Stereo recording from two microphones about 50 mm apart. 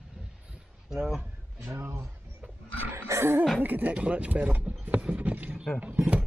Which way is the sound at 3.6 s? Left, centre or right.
Right.